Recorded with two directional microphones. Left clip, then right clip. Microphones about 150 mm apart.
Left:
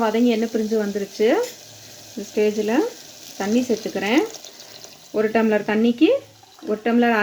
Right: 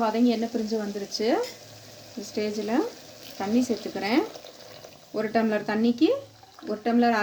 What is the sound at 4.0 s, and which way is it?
Speech, 40° left (ahead or behind).